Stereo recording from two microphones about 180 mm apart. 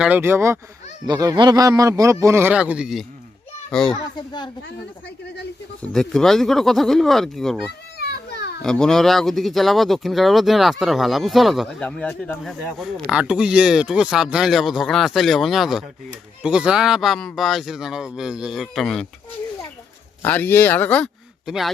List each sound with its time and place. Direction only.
0.0 s a man's voice: 10° right (ahead or behind)
4.3 s speech: 25° left (ahead or behind)
5.8 s speech: 5° left (ahead or behind)
7.9 s children playing: 65° left (ahead or behind)
8.6 s speech: 5° left (ahead or behind)
20.2 s speech: 10° left (ahead or behind)